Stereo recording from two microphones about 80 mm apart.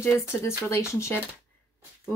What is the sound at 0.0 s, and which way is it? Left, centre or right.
Speech, left.